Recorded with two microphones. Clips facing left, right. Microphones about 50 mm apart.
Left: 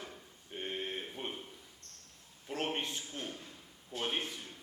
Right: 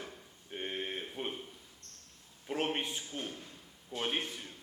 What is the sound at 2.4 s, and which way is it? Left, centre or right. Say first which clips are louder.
A man's voice: right 2 dB; centre.